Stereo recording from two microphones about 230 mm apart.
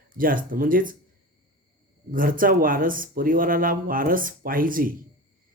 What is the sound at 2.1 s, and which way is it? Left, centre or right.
Speech, right.